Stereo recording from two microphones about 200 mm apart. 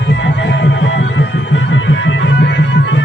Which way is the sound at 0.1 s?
65° left (ahead or behind).